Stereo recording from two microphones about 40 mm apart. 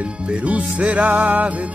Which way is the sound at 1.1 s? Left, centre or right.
Right.